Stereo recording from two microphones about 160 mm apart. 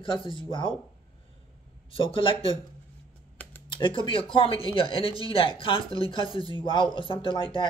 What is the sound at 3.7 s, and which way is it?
Speech, 30° left (ahead or behind).